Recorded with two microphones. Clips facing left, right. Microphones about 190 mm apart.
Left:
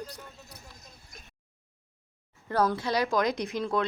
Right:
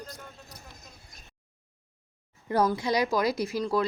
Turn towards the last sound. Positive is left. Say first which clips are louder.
# right 2 dB
turn(degrees=-5)  # may be behind; listen again after turning